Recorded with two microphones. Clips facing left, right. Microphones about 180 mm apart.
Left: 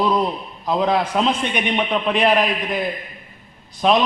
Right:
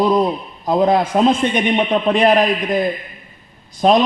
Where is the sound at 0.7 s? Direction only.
45° right (ahead or behind).